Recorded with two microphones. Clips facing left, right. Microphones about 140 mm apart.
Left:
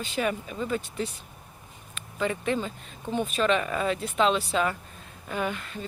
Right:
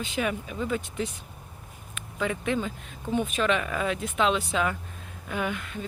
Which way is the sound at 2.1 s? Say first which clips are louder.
Even; 5° right (ahead or behind).